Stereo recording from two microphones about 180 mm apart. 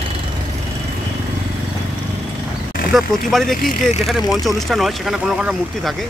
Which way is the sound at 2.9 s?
Centre (ahead or behind).